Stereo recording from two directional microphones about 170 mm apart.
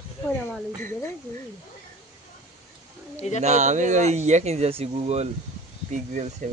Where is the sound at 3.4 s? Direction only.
40° right (ahead or behind).